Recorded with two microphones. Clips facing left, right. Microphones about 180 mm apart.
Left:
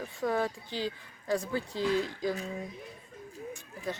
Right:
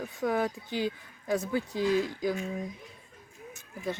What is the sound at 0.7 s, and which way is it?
Speech, 15° right (ahead or behind).